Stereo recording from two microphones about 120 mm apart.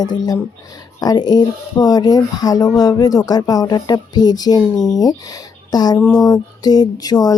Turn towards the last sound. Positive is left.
turn(degrees=35)  # may be behind; listen again after turning